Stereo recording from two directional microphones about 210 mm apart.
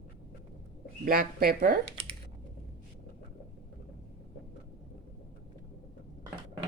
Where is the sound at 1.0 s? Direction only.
40° right (ahead or behind).